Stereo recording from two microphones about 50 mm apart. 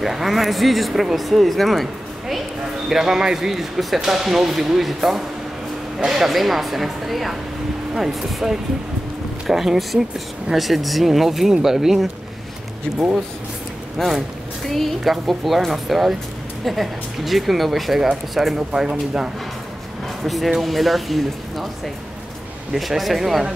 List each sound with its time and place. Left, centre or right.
0.0 s speech: centre
13.9 s speech: centre
18.6 s speech: centre
20.2 s speech: centre